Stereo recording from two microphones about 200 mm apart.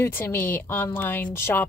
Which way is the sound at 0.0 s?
10° left (ahead or behind).